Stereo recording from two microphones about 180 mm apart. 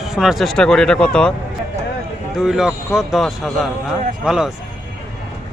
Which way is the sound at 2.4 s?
5° right (ahead or behind).